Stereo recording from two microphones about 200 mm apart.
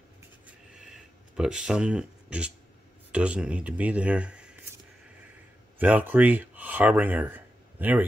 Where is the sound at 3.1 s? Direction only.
5° right (ahead or behind).